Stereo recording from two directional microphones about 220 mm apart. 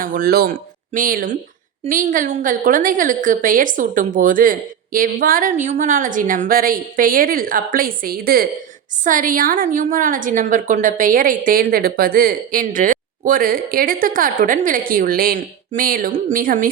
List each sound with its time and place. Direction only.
0.0 s a woman's voice: 40° right (ahead or behind)